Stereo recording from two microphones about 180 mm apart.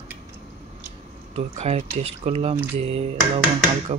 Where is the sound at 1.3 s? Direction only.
35° right (ahead or behind).